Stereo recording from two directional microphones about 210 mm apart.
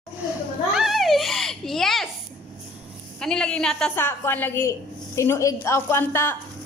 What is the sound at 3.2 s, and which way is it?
A woman's voice, 5° left (ahead or behind).